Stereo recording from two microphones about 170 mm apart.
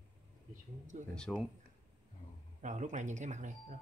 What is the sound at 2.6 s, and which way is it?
Speech, 45° right (ahead or behind).